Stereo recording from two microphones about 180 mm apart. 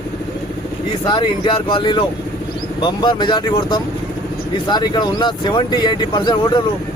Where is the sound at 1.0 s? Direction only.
25° left (ahead or behind).